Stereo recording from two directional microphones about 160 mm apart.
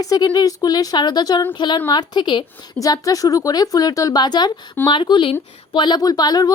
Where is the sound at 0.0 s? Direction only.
25° left (ahead or behind).